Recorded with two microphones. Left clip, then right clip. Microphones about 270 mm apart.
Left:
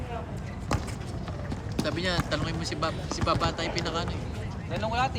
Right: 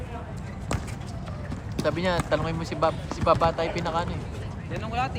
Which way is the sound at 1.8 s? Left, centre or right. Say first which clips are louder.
Right 4 dB; centre.